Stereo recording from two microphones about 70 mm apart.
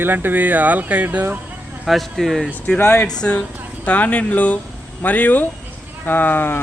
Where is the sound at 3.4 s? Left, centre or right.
Left.